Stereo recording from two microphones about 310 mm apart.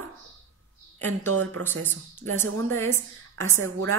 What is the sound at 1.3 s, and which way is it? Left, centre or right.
A woman's voice, right.